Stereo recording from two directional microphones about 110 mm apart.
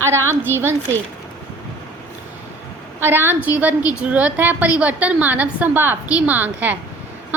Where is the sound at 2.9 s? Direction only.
20° right (ahead or behind).